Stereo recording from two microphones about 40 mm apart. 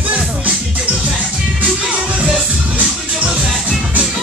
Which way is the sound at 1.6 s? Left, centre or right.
Right.